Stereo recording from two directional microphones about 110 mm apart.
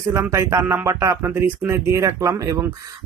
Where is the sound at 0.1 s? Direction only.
25° right (ahead or behind).